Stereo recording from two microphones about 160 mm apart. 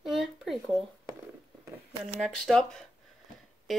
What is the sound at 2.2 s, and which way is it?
Speech, 5° left (ahead or behind).